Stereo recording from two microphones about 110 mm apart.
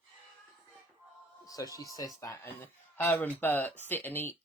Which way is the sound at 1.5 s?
35° left (ahead or behind).